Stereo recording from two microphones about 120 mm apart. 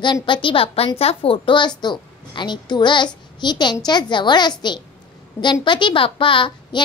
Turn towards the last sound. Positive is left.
turn(degrees=45)  # may be behind; listen again after turning